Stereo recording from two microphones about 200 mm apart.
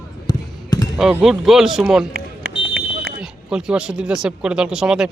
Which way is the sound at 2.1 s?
45° right (ahead or behind).